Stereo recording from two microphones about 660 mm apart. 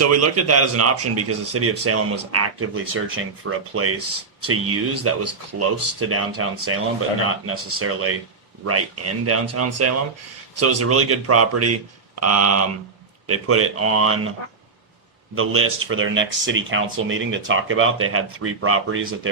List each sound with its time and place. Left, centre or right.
0.0 s speech: right
15.4 s speech: centre